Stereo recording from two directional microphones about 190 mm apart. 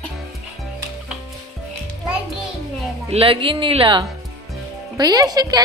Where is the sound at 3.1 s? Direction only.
30° right (ahead or behind).